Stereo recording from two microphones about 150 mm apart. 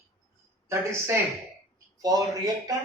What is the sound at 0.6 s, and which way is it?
A woman's voice, 20° right (ahead or behind).